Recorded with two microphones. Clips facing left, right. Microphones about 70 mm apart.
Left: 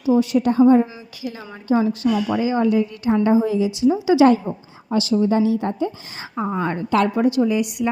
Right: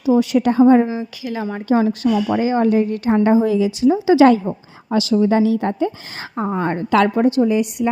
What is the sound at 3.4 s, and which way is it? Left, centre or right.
Speech, right.